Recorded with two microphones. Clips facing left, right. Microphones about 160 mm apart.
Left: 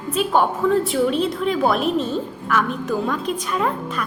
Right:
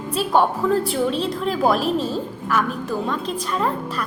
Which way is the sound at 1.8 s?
35° right (ahead or behind).